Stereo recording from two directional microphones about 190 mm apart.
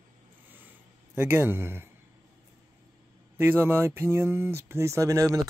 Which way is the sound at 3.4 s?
10° right (ahead or behind).